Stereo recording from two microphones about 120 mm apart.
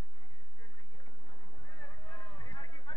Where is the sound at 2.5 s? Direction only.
35° left (ahead or behind).